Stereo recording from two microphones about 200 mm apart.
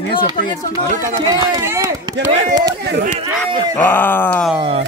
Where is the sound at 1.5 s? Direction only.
10° right (ahead or behind).